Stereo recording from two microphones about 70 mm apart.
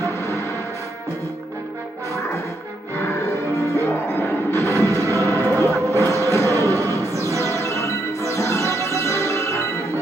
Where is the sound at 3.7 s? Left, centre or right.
Left.